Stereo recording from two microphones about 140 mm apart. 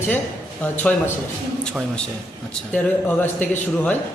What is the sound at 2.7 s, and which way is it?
A man's voice, 15° left (ahead or behind).